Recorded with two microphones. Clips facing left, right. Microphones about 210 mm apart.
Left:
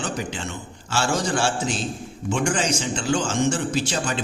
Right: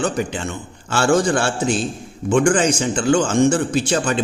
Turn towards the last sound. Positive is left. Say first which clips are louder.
# right 6 dB
turn(degrees=-55)  # may be behind; listen again after turning